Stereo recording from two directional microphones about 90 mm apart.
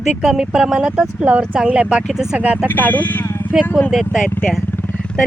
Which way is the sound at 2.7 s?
20° left (ahead or behind).